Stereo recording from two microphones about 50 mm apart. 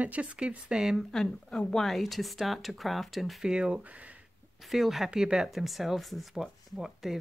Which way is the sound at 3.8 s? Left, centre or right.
Right.